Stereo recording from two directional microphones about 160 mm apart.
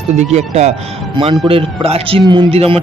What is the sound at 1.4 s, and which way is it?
Speech, 35° right (ahead or behind).